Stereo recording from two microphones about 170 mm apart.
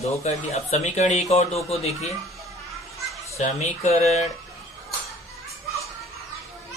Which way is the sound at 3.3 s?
40° left (ahead or behind).